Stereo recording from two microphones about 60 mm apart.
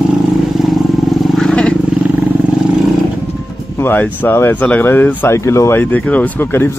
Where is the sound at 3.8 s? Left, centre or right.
Left.